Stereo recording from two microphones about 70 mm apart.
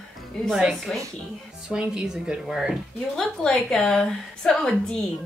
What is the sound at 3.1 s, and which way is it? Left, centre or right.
A woman's voice, centre.